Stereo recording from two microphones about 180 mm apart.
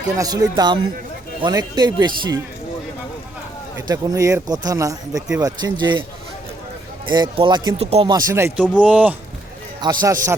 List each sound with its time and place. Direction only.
0.2 s speech: 20° right (ahead or behind)
3.8 s speech: 20° right (ahead or behind)
7.1 s speech: 25° right (ahead or behind)
8.0 s speech: 20° right (ahead or behind)
9.8 s speech: 25° right (ahead or behind)